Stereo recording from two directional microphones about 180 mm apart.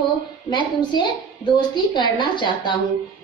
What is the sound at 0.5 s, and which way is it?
A woman's voice, 25° left (ahead or behind).